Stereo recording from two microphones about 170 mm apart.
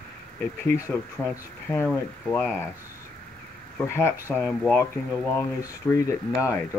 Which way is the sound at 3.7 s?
15° left (ahead or behind).